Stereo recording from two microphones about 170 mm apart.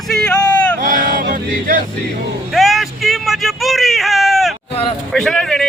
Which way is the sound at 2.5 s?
Centre (ahead or behind).